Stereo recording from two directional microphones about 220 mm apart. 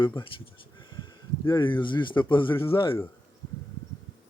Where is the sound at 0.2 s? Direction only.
20° left (ahead or behind).